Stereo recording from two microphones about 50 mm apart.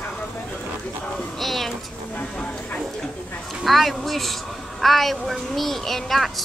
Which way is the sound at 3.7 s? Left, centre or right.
Centre.